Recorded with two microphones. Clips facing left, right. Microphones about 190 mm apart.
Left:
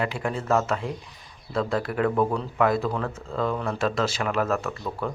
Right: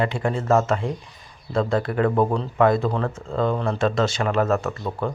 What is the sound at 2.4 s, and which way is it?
Speech, 5° left (ahead or behind).